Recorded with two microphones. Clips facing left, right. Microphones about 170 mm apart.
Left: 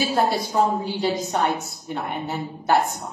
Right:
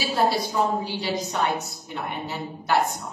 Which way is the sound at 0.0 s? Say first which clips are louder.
Left 1 dB; 50° left (ahead or behind).